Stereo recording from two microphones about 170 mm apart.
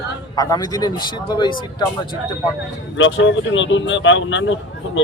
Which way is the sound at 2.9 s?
90° left.